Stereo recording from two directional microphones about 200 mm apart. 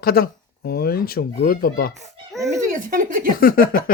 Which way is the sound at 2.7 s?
45° right (ahead or behind).